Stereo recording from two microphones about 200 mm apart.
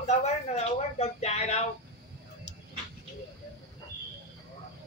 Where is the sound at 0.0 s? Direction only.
35° left (ahead or behind).